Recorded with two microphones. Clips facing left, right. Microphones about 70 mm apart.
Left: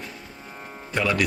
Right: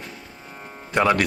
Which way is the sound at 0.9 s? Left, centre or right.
Right.